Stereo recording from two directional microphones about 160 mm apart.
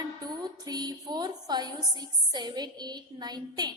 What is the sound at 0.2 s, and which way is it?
A woman's voice, 25° right (ahead or behind).